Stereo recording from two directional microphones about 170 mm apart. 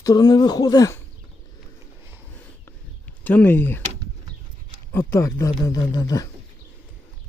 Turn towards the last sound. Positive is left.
turn(degrees=25)  # may be behind; listen again after turning